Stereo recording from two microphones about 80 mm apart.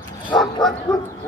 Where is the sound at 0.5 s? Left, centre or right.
Left.